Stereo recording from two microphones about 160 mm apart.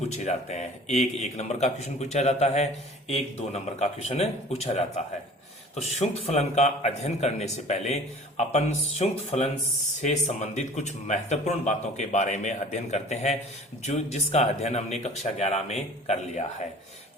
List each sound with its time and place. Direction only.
0.1 s a man's voice: 45° left (ahead or behind)